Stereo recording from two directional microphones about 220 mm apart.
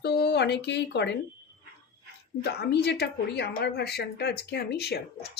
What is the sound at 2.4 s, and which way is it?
A woman's voice, 50° left (ahead or behind).